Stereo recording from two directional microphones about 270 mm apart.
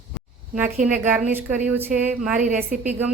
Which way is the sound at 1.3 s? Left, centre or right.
Centre.